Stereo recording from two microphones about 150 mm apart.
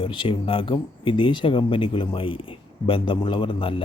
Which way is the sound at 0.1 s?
35° left (ahead or behind).